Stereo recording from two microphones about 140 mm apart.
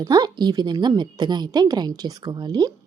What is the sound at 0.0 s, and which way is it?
A woman's voice, 30° right (ahead or behind).